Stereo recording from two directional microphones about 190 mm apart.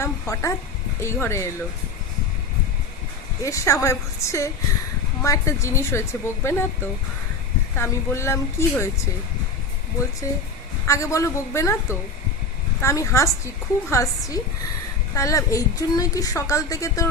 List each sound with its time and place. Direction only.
0.0 s a woman's voice: 15° left (ahead or behind)
3.4 s a woman's voice: 15° left (ahead or behind)
7.8 s a woman's voice: 15° left (ahead or behind)
10.8 s a woman's voice: 15° left (ahead or behind)